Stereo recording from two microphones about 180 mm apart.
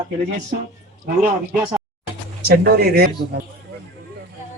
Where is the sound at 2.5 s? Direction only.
60° right (ahead or behind).